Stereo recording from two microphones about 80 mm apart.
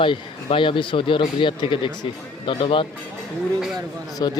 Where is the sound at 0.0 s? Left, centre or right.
Left.